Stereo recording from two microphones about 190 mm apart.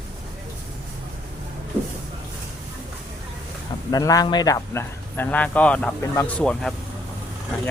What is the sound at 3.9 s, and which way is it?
Speech, 20° left (ahead or behind).